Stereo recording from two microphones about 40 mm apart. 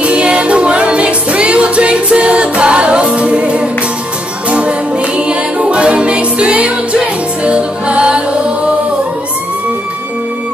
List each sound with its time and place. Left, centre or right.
0.0 s music: right